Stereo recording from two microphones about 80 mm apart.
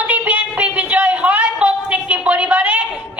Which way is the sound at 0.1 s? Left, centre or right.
Centre.